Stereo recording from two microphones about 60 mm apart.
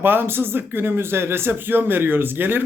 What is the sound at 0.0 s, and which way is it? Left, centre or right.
Speech, right.